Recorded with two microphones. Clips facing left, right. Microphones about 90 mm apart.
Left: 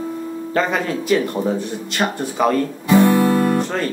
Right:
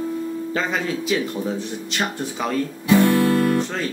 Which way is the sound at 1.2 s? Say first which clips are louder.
Left 4 dB; 60° left (ahead or behind).